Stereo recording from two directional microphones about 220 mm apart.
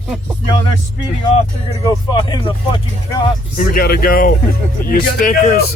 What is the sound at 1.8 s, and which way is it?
Speech, 15° left (ahead or behind).